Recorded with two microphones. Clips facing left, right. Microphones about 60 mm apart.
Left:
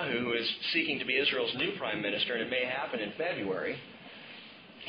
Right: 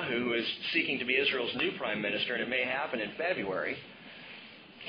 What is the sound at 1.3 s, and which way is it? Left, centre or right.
Speech, right.